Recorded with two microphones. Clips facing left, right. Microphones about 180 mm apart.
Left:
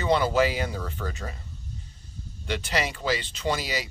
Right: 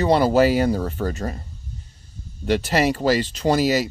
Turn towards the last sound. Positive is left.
turn(degrees=-45)  # may be behind; listen again after turning